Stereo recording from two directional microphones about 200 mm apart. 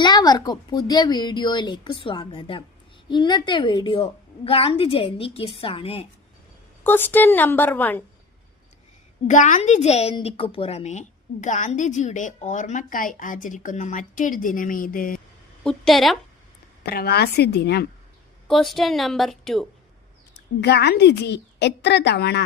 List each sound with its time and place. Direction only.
0.0 s a woman's voice: 20° left (ahead or behind)
6.8 s a woman's voice: 10° left (ahead or behind)
9.2 s a woman's voice: 40° left (ahead or behind)
15.6 s a woman's voice: centre (ahead or behind)
16.8 s speech: 50° left (ahead or behind)
18.4 s a woman's voice: centre (ahead or behind)
20.6 s a woman's voice: 55° left (ahead or behind)